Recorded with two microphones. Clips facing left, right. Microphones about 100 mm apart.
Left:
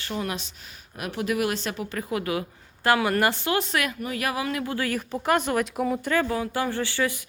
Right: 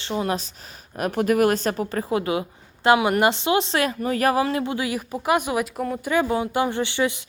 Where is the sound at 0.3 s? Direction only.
40° right (ahead or behind); by 5.7 s 10° right (ahead or behind).